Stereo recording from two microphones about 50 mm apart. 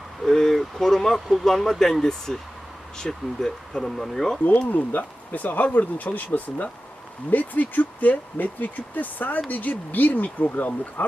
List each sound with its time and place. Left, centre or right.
0.3 s speech: centre
4.4 s speech: left